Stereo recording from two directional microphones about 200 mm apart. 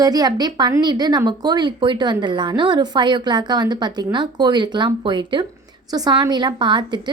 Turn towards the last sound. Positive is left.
turn(degrees=-20)  # may be behind; listen again after turning